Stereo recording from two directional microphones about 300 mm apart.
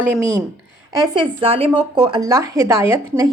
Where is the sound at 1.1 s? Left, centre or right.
Centre.